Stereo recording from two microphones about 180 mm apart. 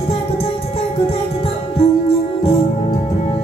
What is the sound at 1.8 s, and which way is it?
Music, 35° left (ahead or behind).